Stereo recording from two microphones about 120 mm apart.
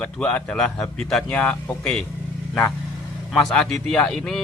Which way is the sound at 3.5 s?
5° left (ahead or behind).